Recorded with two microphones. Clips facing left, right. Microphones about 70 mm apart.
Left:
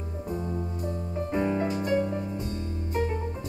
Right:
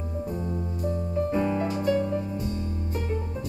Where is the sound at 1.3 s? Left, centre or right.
Left.